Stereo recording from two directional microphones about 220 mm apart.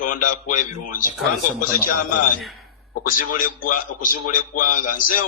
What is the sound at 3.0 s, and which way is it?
A man's voice, 40° left (ahead or behind).